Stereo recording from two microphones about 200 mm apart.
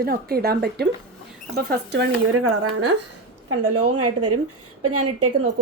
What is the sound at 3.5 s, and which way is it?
Speech, 90° right.